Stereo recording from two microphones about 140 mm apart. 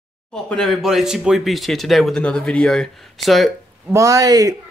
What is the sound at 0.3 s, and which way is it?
Speech, 5° left (ahead or behind).